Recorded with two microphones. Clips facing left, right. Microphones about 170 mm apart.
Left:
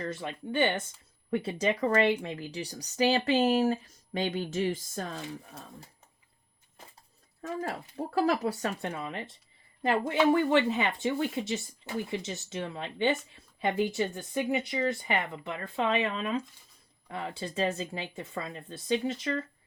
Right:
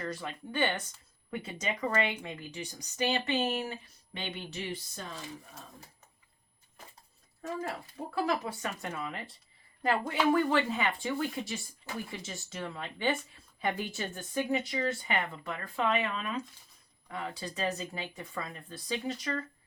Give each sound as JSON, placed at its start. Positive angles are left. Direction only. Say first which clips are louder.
{"t": 0.0, "sound": "speech", "louder": "left 3 dB", "side_deg": 25}
{"t": 8.1, "sound": "speech", "louder": "left 5 dB", "side_deg": 40}